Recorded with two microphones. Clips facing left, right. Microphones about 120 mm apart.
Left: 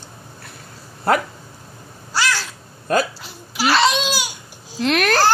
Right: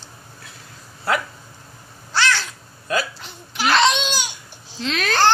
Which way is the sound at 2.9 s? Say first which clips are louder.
Left 5 dB; 50° left (ahead or behind).